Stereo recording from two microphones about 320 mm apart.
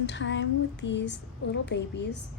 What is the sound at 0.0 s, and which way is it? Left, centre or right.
A woman's voice, left.